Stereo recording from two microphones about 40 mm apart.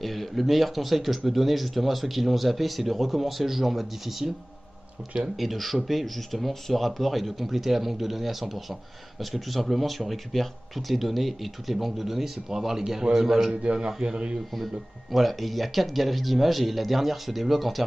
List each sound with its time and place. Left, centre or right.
0.0 s a man's voice: centre
13.5 s speech: right
14.5 s speech: centre